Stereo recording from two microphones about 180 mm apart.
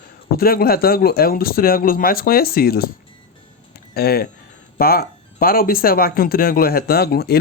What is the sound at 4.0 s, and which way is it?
Speech, 60° left (ahead or behind).